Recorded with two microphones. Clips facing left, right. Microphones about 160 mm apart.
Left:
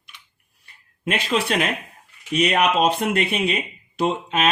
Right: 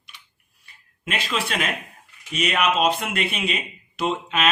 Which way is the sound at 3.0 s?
45° left (ahead or behind).